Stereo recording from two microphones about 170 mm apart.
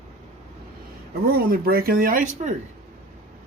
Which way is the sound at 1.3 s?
60° right (ahead or behind).